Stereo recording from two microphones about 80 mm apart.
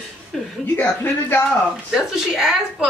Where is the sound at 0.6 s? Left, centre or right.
Left.